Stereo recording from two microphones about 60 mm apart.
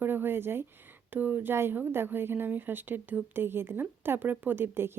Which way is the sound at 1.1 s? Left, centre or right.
Right.